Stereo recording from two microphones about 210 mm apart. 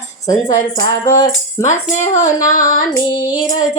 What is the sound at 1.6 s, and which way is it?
Speech, 35° left (ahead or behind).